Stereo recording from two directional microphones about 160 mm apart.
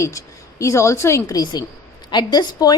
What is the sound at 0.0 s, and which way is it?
A woman's voice, 20° left (ahead or behind).